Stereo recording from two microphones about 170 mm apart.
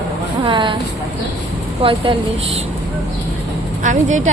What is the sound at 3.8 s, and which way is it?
Speech, 45° right (ahead or behind).